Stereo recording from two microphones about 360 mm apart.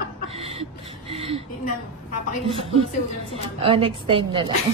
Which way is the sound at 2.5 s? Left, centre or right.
Centre.